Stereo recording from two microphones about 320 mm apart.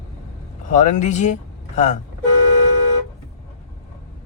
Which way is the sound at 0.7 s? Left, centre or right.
Left.